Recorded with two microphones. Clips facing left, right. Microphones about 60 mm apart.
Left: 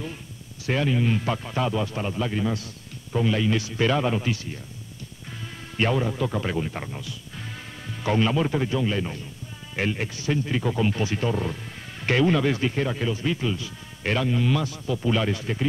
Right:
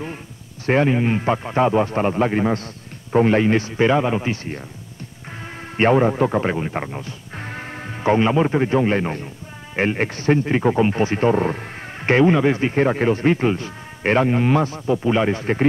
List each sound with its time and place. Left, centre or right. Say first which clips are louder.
0.7 s speech: right 6 dB; right
5.8 s speech: right 8 dB; right